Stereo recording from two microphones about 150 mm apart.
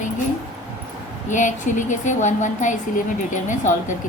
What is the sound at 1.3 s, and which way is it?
A woman's voice, 55° left (ahead or behind).